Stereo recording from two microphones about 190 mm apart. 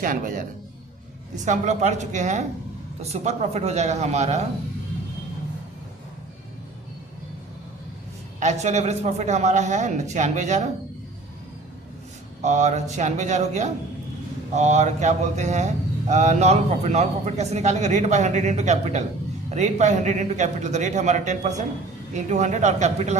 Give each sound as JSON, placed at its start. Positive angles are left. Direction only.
{"t": 0.0, "sound": "a man's voice", "side_deg": -45}
{"t": 1.5, "sound": "speech", "side_deg": -40}
{"t": 8.4, "sound": "speech", "side_deg": -40}
{"t": 12.4, "sound": "speech", "side_deg": -40}